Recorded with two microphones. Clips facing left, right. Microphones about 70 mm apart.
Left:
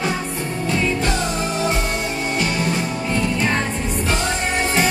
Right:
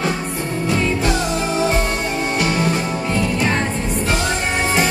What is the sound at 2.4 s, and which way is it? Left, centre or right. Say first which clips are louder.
Music: right 4 dB; right.